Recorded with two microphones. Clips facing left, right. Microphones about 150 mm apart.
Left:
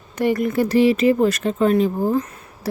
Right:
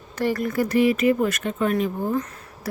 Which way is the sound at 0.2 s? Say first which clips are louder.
Left 4 dB; 20° left (ahead or behind).